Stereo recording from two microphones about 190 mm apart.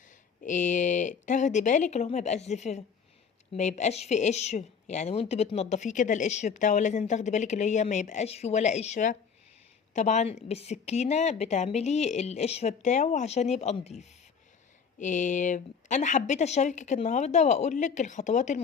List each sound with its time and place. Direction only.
0.4 s a woman's voice: 40° left (ahead or behind)